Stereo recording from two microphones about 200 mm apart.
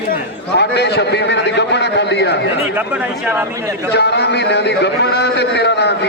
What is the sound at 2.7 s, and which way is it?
Speech, 10° right (ahead or behind).